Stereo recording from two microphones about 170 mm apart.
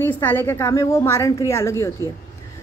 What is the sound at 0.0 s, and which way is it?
A woman's voice, 15° left (ahead or behind).